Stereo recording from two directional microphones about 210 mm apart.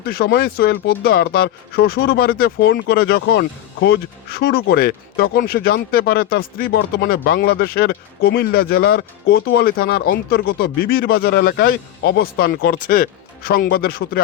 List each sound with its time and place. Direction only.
0.0 s speech: 45° left (ahead or behind)